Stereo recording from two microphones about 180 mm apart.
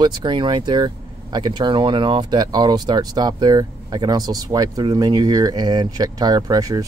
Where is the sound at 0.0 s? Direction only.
25° right (ahead or behind).